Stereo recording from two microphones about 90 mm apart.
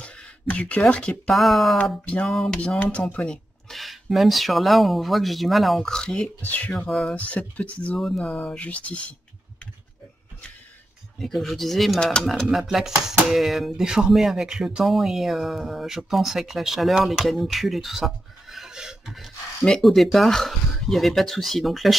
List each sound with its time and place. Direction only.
0.0 s speech: 15° left (ahead or behind)
1.3 s speech: centre (ahead or behind)
1.8 s speech: 10° left (ahead or behind)
6.4 s speech: 20° left (ahead or behind)
6.9 s speech: centre (ahead or behind)
7.2 s speech: 15° left (ahead or behind)
11.1 s speech: 5° left (ahead or behind)